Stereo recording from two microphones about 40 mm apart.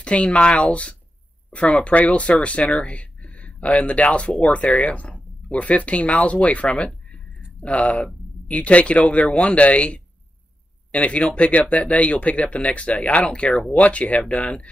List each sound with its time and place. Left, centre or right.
0.0 s speech: left